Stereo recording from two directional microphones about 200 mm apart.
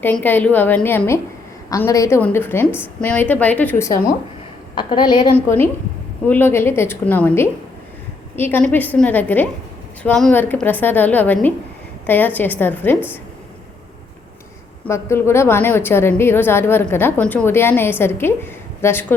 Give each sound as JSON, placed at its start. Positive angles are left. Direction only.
{"t": 0.0, "sound": "a woman's voice", "side_deg": 10}
{"t": 4.8, "sound": "a woman's voice", "side_deg": 25}
{"t": 6.2, "sound": "a woman's voice", "side_deg": 10}
{"t": 14.8, "sound": "a woman's voice", "side_deg": 15}